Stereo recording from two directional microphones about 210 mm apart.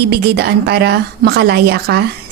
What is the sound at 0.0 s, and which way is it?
A woman's voice, 50° right (ahead or behind).